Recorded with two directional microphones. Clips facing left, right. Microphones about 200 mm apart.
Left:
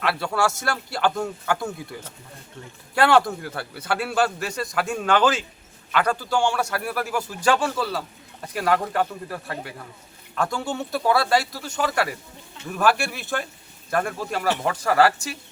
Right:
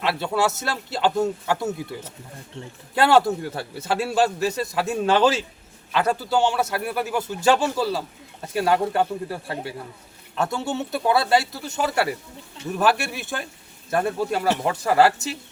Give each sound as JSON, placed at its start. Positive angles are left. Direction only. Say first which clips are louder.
{"t": 0.0, "sound": "a man's voice", "louder": "right 1 dB", "side_deg": -25}